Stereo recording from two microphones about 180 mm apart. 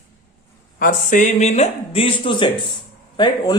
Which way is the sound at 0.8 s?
45° left (ahead or behind).